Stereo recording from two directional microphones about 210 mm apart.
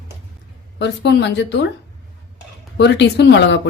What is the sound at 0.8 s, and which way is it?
Speech, 55° left (ahead or behind).